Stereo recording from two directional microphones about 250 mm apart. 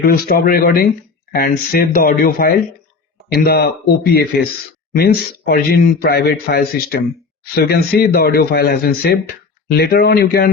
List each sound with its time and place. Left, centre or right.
0.0 s speech: left